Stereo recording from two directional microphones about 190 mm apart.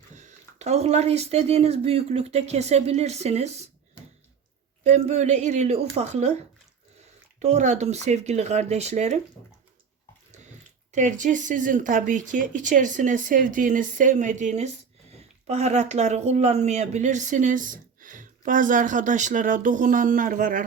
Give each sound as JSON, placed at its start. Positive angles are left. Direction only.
{"t": 0.1, "sound": "speech", "side_deg": -40}
{"t": 4.8, "sound": "speech", "side_deg": -35}
{"t": 10.9, "sound": "speech", "side_deg": -40}